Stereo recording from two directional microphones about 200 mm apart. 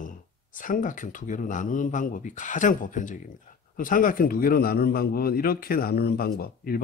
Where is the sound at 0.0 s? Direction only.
40° left (ahead or behind).